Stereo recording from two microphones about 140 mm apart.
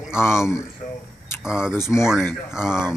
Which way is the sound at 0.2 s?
20° left (ahead or behind).